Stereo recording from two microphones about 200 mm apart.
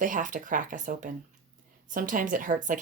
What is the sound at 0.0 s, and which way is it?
Speech, 40° right (ahead or behind).